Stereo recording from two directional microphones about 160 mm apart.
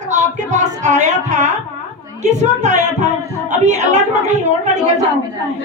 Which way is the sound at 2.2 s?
50° right (ahead or behind).